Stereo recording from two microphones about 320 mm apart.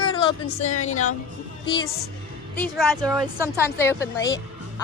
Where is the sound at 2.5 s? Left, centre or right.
Centre.